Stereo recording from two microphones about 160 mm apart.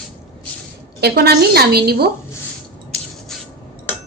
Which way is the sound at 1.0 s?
90° right.